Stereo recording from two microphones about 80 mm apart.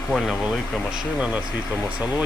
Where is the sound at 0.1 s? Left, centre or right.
Centre.